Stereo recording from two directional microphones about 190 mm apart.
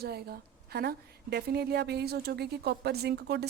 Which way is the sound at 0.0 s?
55° right (ahead or behind).